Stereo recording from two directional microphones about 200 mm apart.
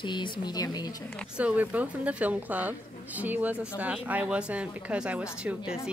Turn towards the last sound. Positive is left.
turn(degrees=-5)  # may be behind; listen again after turning